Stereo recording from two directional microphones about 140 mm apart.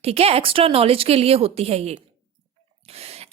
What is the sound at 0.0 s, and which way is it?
A woman's voice, 45° right (ahead or behind).